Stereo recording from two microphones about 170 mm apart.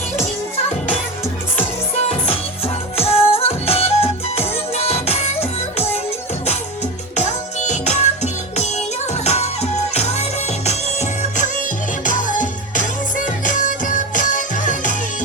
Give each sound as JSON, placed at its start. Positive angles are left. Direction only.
{"t": 2.0, "sound": "music", "side_deg": 35}
{"t": 7.2, "sound": "music", "side_deg": 45}
{"t": 12.0, "sound": "music", "side_deg": 50}